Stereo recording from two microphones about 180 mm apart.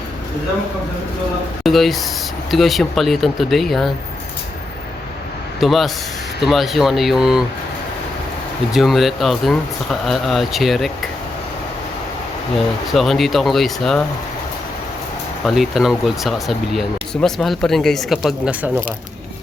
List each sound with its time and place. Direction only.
1.6 s speech: centre (ahead or behind)
5.5 s speech: centre (ahead or behind)
8.7 s speech: centre (ahead or behind)
12.5 s speech: centre (ahead or behind)
15.4 s speech: centre (ahead or behind)